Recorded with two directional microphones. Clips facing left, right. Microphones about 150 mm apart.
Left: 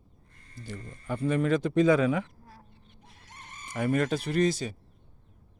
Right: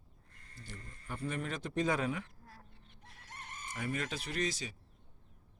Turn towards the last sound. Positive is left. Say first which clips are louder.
# left 11 dB
turn(degrees=55)  # may be behind; listen again after turning